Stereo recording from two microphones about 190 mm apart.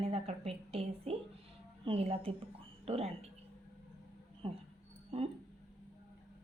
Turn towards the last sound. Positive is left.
turn(degrees=-30)  # may be behind; listen again after turning